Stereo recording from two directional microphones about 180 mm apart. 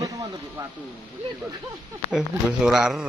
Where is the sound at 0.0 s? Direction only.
20° right (ahead or behind).